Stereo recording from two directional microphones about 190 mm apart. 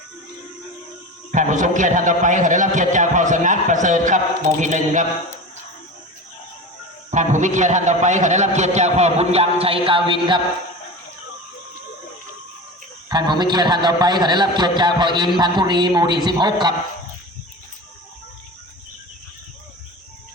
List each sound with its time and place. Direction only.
1.3 s a man's voice: 40° right (ahead or behind)
7.1 s a man's voice: 40° right (ahead or behind)
13.1 s a man's voice: 20° right (ahead or behind)